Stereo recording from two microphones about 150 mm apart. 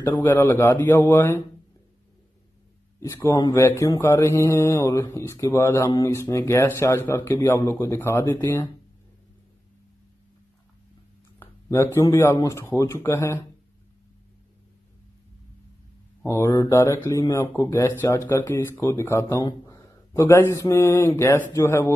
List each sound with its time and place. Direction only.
0.0 s speech: 15° left (ahead or behind)
3.0 s speech: 20° left (ahead or behind)
11.3 s speech: 20° left (ahead or behind)
16.3 s speech: 20° left (ahead or behind)